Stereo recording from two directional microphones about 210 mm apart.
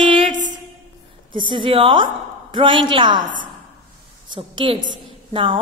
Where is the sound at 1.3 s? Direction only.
25° right (ahead or behind).